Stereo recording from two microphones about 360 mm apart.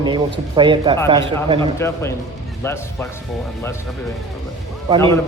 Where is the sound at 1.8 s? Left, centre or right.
Centre.